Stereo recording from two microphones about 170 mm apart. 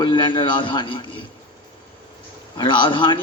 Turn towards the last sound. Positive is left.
turn(degrees=25)  # may be behind; listen again after turning